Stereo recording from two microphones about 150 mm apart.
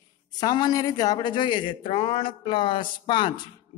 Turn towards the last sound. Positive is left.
turn(degrees=35)  # may be behind; listen again after turning